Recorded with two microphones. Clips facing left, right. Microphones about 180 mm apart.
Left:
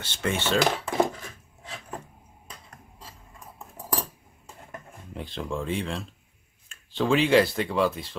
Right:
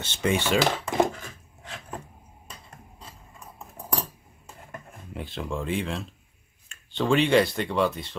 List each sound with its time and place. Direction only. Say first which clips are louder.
0.0 s cutlery: right 3 dB; 20° right (ahead or behind)
0.8 s a sound: right 1 dB; 5° left (ahead or behind)
5.1 s speech: even; centre (ahead or behind)